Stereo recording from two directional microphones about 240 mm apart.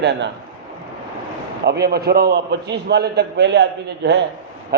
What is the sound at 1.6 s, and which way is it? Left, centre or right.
A man's voice, right.